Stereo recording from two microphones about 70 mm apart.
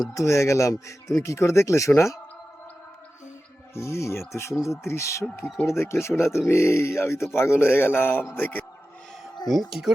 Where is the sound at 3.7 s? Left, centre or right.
Left.